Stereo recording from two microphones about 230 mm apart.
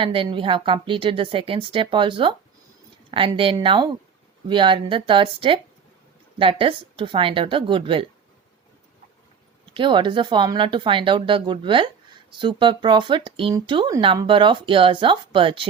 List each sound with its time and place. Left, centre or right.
0.0 s speech: right
9.7 s speech: right